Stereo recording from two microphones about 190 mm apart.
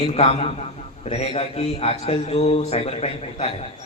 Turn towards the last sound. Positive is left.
turn(degrees=30)  # may be behind; listen again after turning